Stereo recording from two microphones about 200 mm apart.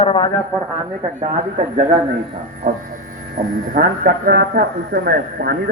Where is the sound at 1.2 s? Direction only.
40° right (ahead or behind).